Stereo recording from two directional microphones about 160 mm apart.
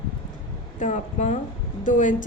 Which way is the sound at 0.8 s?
50° left (ahead or behind).